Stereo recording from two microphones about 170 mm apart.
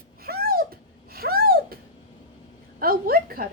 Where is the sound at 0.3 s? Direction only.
65° right (ahead or behind).